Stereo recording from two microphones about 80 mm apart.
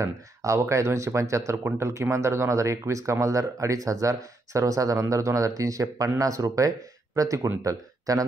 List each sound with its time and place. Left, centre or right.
0.0 s speech: right